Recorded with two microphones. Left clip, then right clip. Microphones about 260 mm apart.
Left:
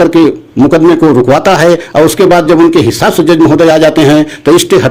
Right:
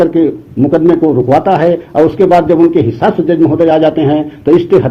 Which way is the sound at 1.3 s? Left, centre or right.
Left.